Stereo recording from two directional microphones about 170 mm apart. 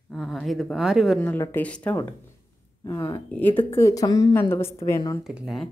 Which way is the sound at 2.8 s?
20° left (ahead or behind).